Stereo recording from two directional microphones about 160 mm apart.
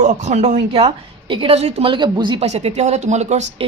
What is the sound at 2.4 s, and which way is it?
Speech, 45° right (ahead or behind).